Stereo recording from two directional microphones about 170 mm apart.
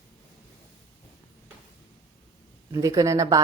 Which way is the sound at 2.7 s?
20° right (ahead or behind).